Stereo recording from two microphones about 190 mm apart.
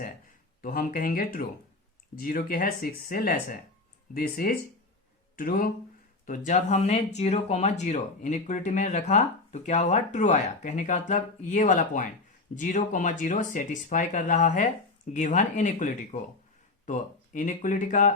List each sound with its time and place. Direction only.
0.6 s speech: 50° left (ahead or behind)